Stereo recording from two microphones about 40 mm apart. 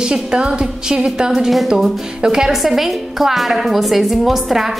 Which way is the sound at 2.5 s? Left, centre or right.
Centre.